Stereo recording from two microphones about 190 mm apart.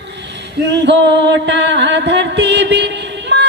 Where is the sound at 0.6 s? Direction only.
65° right (ahead or behind).